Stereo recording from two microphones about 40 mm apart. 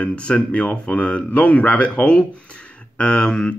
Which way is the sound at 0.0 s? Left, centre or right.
Left.